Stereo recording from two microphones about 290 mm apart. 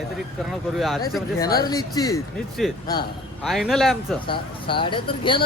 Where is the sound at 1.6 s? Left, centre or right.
Centre.